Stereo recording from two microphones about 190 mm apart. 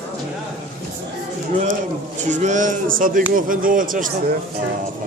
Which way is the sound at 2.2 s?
40° right (ahead or behind).